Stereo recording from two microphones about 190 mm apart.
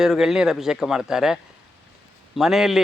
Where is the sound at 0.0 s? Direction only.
Centre (ahead or behind).